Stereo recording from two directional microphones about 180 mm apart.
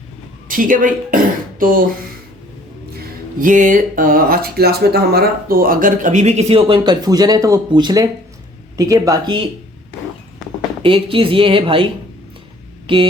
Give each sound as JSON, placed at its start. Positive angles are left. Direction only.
{"t": 0.4, "sound": "speech", "side_deg": -50}
{"t": 3.3, "sound": "speech", "side_deg": -50}
{"t": 10.8, "sound": "speech", "side_deg": -30}
{"t": 12.9, "sound": "speech", "side_deg": -30}